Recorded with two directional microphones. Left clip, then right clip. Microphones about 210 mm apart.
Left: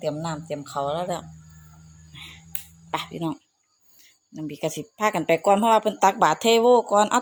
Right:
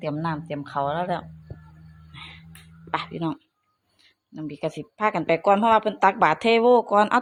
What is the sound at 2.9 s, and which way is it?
Speech, 15° left (ahead or behind).